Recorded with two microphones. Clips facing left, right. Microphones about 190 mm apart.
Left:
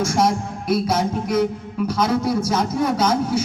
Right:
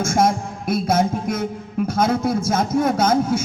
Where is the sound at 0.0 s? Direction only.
50° right (ahead or behind).